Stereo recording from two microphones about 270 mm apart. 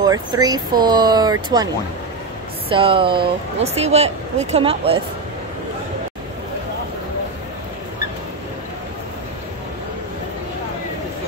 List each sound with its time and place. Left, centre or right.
0.0 s speech: centre
2.7 s speech: centre